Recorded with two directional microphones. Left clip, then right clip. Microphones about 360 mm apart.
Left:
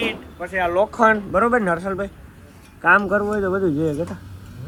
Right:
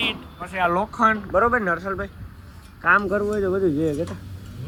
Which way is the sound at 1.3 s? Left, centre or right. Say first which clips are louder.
Left 1 dB; left.